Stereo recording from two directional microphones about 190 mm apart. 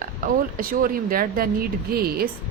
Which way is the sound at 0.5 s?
50° right (ahead or behind).